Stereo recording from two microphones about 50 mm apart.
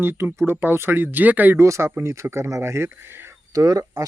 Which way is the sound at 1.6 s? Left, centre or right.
Right.